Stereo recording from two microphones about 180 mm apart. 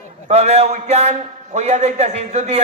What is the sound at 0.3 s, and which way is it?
A man's voice, 35° right (ahead or behind).